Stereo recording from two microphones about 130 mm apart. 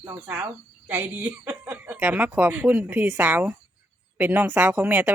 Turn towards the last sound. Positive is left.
turn(degrees=-15)  # may be behind; listen again after turning